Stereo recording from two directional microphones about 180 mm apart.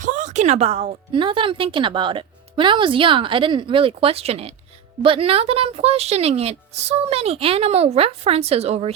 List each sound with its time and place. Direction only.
0.0 s speech: 45° right (ahead or behind)